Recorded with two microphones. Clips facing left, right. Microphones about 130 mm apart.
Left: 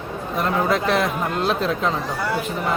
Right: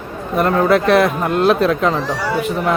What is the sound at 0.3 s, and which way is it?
A man's voice, 65° right (ahead or behind).